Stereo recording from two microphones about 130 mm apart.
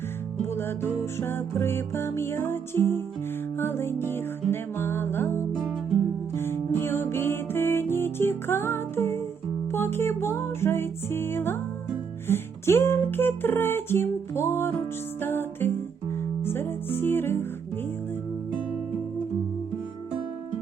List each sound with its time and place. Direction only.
0.5 s music: 15° left (ahead or behind)